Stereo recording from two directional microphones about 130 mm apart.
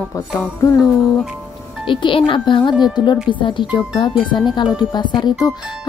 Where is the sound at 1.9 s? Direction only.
40° left (ahead or behind).